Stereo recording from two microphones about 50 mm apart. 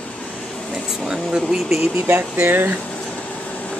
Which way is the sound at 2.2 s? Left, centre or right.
Right.